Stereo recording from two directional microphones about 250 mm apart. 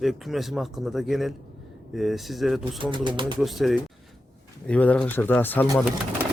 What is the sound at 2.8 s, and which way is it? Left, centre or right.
Speech, centre.